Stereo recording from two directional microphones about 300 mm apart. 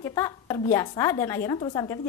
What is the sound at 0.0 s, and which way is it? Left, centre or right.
A woman's voice, centre.